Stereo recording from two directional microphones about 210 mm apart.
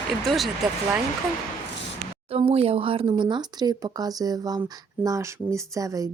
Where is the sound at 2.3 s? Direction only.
30° right (ahead or behind).